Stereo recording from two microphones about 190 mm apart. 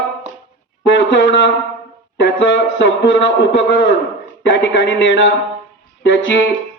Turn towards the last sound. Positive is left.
turn(degrees=70)  # may be behind; listen again after turning